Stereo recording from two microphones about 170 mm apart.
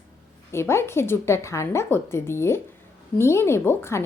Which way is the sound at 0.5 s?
15° left (ahead or behind).